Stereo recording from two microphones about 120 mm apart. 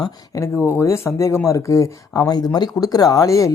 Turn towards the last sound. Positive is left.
turn(degrees=25)  # may be behind; listen again after turning